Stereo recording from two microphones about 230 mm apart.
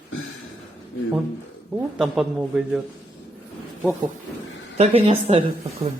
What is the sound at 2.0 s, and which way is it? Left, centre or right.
Speech, centre.